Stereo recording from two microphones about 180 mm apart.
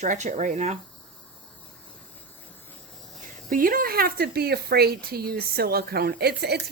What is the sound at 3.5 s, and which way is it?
Speech, 50° right (ahead or behind).